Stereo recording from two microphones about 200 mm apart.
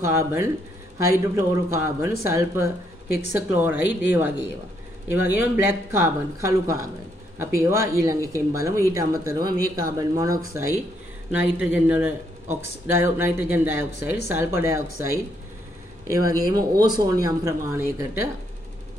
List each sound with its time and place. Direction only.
0.0 s speech: 15° right (ahead or behind)
5.1 s speech: 10° right (ahead or behind)